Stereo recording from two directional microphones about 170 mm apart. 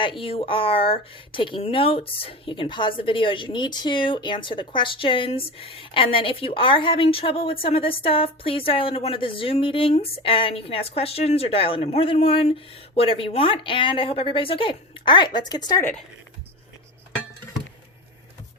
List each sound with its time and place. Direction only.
0.0 s speech: 30° left (ahead or behind)
15.8 s speech: 10° left (ahead or behind)